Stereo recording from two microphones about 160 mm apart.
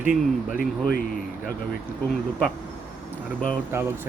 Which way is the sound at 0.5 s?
65° left (ahead or behind).